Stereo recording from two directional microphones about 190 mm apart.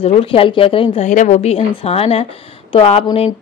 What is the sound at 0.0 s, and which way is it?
Speech, 30° left (ahead or behind).